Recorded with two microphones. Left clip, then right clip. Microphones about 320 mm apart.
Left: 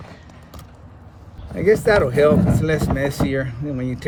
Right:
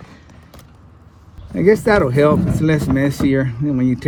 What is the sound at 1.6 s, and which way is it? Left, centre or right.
Speech, centre.